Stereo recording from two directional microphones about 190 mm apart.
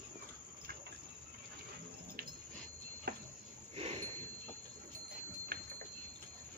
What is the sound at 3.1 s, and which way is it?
Cricket, 55° right (ahead or behind).